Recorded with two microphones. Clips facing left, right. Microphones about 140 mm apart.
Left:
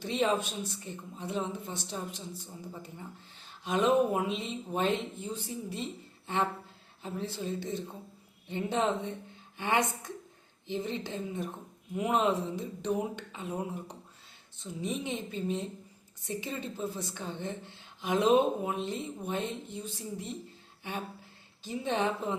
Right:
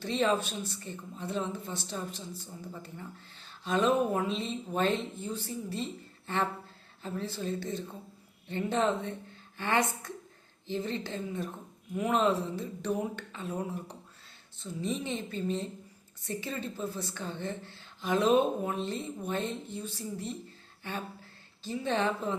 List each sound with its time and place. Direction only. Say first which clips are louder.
0.0 s a woman's voice: right 1 dB; 15° left (ahead or behind)